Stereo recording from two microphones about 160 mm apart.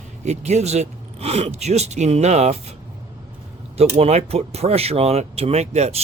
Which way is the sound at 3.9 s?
40° right (ahead or behind).